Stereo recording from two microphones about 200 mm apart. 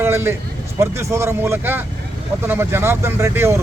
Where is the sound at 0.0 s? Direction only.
10° right (ahead or behind).